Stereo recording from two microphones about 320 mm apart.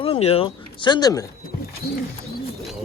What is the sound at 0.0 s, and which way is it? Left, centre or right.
Speech, centre.